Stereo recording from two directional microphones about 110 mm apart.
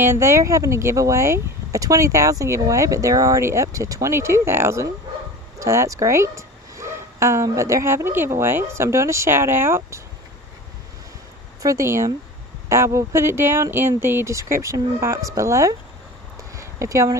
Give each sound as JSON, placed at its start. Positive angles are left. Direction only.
{"t": 0.0, "sound": "speech", "side_deg": -25}
{"t": 11.6, "sound": "speech", "side_deg": -25}
{"t": 16.5, "sound": "a sound", "side_deg": -25}